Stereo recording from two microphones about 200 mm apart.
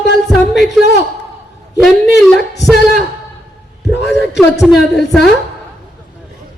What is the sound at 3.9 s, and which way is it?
Speech, 60° left (ahead or behind).